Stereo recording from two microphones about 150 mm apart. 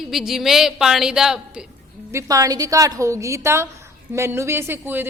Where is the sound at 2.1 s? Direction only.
20° right (ahead or behind).